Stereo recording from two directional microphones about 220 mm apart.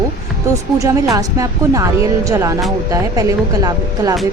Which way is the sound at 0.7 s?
15° right (ahead or behind).